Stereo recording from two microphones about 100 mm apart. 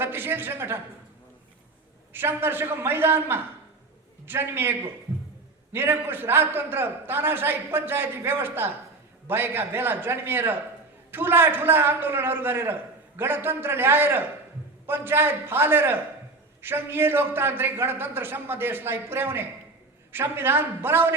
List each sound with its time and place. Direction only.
0.0 s a man's voice: 20° right (ahead or behind)
2.1 s a man's voice: 20° right (ahead or behind)